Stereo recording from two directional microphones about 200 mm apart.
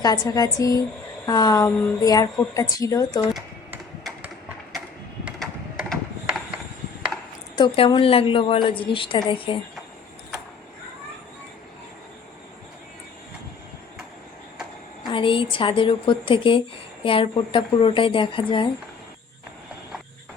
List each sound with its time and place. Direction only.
0.0 s a woman's voice: 20° left (ahead or behind)
3.3 s typing: 5° right (ahead or behind)
5.2 s a sound: centre (ahead or behind)
7.5 s a woman's voice: 20° left (ahead or behind)
15.0 s a woman's voice: 25° left (ahead or behind)